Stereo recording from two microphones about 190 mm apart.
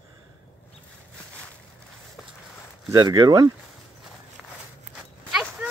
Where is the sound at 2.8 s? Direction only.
20° right (ahead or behind).